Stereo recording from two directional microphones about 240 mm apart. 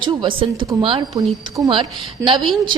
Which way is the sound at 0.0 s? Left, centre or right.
Centre.